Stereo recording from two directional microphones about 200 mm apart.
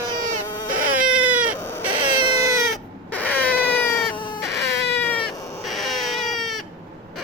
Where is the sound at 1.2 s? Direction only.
5° right (ahead or behind).